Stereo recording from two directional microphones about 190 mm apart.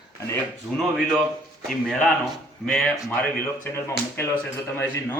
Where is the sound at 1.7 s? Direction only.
Centre (ahead or behind).